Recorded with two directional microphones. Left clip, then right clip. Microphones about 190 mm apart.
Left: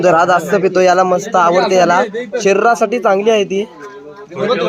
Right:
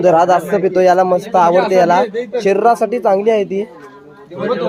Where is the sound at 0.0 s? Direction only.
10° left (ahead or behind).